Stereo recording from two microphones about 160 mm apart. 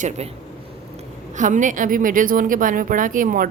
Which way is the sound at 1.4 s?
50° right (ahead or behind).